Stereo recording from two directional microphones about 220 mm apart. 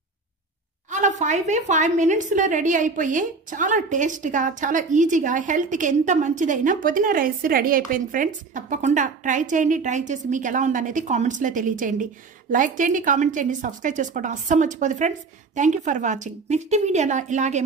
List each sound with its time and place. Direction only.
0.8 s a woman's voice: 35° right (ahead or behind)